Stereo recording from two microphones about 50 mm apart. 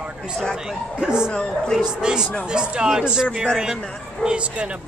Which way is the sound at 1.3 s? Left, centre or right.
Centre.